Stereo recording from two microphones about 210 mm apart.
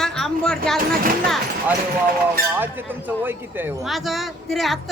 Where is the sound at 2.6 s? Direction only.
10° right (ahead or behind).